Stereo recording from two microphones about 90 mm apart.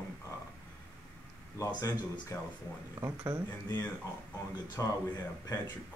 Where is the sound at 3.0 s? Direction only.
35° right (ahead or behind).